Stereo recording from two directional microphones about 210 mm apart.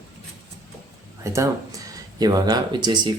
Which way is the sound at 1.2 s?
15° right (ahead or behind).